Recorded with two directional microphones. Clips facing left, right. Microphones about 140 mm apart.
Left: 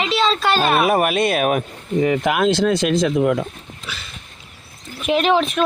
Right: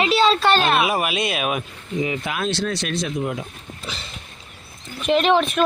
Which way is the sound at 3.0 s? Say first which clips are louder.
Left 8 dB; 70° left (ahead or behind).